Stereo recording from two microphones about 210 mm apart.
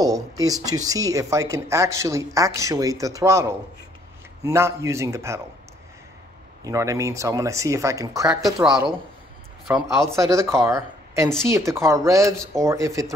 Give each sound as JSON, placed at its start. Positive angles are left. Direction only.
{"t": 0.0, "sound": "speech", "side_deg": -15}
{"t": 6.6, "sound": "speech", "side_deg": -15}
{"t": 8.6, "sound": "speech", "side_deg": -5}
{"t": 9.8, "sound": "speech", "side_deg": -15}